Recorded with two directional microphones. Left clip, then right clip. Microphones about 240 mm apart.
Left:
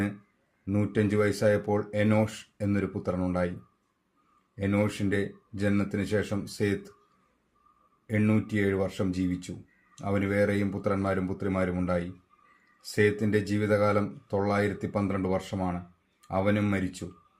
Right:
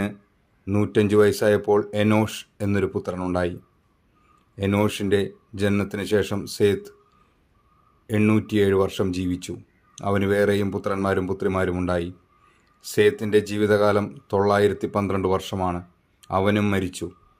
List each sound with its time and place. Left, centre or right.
0.6 s speech: right
4.5 s speech: right
8.0 s speech: right